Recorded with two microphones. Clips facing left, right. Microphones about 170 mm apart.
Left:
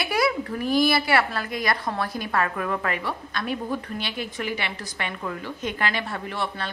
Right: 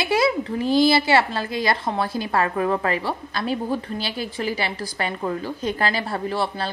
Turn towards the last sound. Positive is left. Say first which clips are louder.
# right 5 dB
turn(degrees=-30)  # may be behind; listen again after turning